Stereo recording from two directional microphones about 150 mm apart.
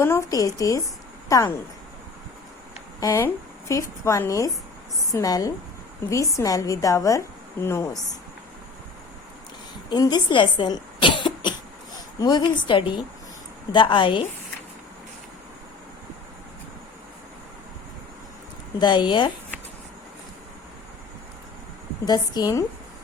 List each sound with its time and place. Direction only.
0.0 s speech: 20° left (ahead or behind)
3.0 s speech: 20° left (ahead or behind)
9.9 s a woman's voice: 30° left (ahead or behind)
18.8 s a woman's voice: 30° left (ahead or behind)
22.0 s speech: 25° left (ahead or behind)